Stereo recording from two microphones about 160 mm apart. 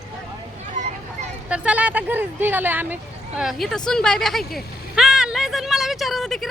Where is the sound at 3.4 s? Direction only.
Centre (ahead or behind).